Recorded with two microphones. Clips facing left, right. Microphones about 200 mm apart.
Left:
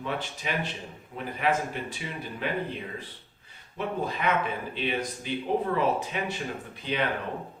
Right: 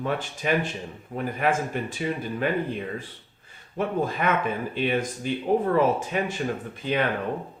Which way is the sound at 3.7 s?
50° right (ahead or behind).